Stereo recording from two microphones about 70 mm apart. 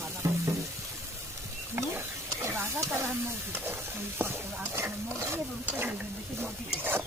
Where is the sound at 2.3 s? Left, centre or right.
Right.